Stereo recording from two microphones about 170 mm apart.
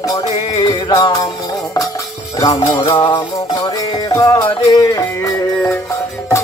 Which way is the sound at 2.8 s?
30° left (ahead or behind).